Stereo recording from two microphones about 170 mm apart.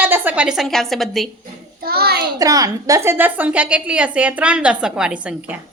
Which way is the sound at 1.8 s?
65° right (ahead or behind).